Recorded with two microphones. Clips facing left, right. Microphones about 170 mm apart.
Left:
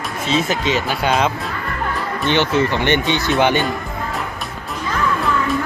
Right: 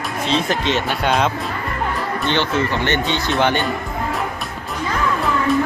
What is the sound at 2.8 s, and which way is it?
Speech, 15° left (ahead or behind).